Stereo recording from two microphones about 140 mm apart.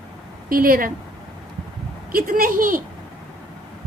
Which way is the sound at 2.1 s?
80° right.